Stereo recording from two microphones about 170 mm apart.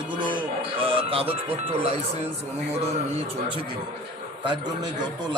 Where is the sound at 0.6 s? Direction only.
30° right (ahead or behind).